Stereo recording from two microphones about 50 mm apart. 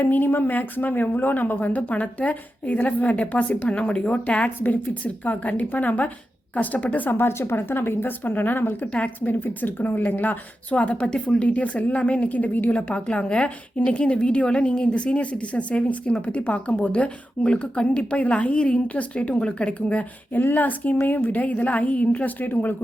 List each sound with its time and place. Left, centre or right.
0.0 s speech: left
3.7 s a woman's voice: left
7.1 s speech: left
8.9 s a woman's voice: left
12.9 s a woman's voice: left
20.3 s speech: left